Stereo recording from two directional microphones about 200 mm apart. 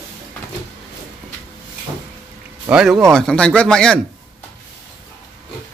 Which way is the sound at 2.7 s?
5° right (ahead or behind).